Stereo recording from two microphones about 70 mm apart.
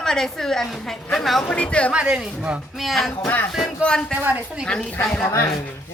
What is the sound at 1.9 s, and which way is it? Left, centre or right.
Speech, centre.